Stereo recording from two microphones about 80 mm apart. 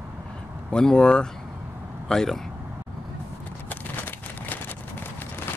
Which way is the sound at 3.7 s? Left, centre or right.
Left.